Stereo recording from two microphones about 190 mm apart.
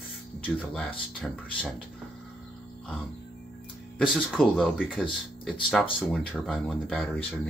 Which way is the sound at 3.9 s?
5° left (ahead or behind).